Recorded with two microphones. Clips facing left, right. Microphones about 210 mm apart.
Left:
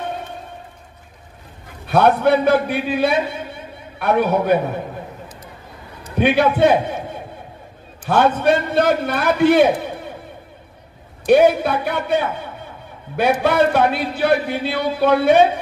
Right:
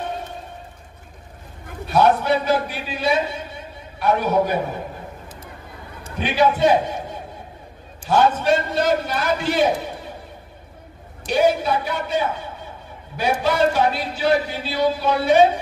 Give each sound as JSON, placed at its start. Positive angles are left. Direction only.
{"t": 1.9, "sound": "a man's voice", "side_deg": 55}
{"t": 6.1, "sound": "a man's voice", "side_deg": 60}
{"t": 11.2, "sound": "a man's voice", "side_deg": 55}